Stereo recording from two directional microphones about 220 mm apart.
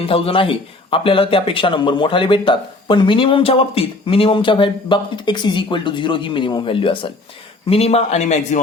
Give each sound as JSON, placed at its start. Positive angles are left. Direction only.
{"t": 0.0, "sound": "speech", "side_deg": 25}